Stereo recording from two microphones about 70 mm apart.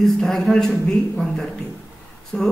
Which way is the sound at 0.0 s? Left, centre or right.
Centre.